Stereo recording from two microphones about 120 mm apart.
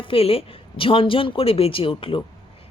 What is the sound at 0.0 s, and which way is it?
A woman's voice, 50° left (ahead or behind).